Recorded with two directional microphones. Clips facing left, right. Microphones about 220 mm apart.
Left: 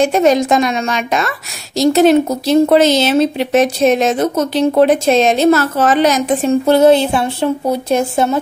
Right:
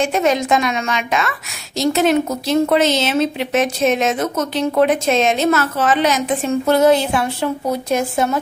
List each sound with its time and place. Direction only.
0.0 s a woman's voice: 35° left (ahead or behind)